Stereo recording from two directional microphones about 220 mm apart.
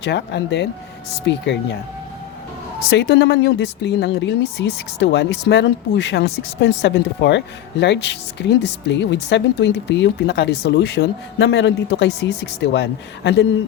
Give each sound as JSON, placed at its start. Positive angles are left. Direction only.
{"t": 0.0, "sound": "speech", "side_deg": 50}
{"t": 2.9, "sound": "speech", "side_deg": 50}